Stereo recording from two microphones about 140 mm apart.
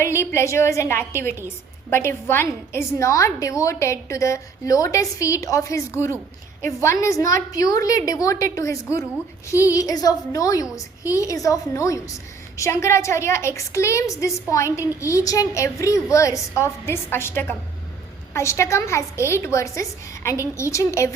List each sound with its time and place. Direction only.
0.0 s a woman's voice: 20° left (ahead or behind)